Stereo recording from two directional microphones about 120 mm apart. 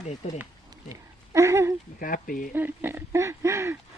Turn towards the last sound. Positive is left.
turn(degrees=-25)  # may be behind; listen again after turning